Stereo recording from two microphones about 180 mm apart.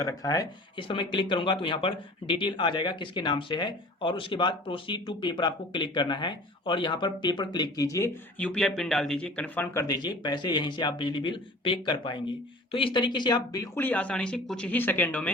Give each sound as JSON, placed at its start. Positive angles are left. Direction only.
{"t": 0.0, "sound": "speech", "side_deg": 20}
{"t": 9.8, "sound": "speech", "side_deg": 20}